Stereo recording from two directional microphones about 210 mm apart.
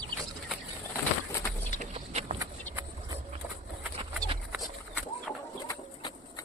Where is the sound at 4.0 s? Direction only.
25° right (ahead or behind).